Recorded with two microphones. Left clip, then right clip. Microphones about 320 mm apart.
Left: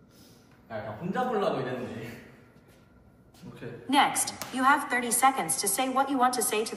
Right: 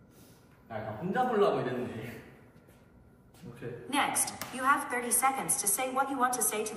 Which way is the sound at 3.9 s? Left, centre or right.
Left.